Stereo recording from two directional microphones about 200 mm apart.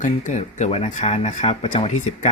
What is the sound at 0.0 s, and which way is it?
Speech, 35° left (ahead or behind).